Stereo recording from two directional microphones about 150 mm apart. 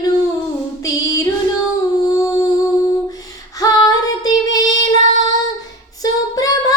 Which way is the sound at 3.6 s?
25° left (ahead or behind).